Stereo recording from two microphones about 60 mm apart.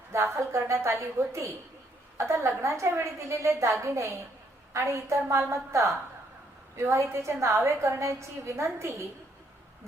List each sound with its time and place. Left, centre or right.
0.1 s a woman's voice: right